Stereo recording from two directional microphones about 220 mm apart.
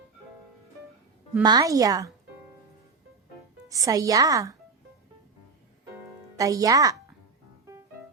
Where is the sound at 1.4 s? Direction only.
15° right (ahead or behind).